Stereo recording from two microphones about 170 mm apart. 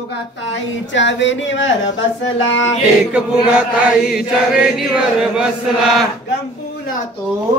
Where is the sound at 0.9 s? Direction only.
90° left.